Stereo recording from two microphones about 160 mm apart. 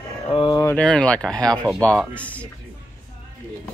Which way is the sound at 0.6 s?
10° left (ahead or behind).